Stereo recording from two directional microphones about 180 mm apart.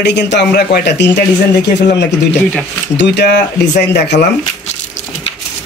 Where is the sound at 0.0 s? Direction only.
75° left (ahead or behind).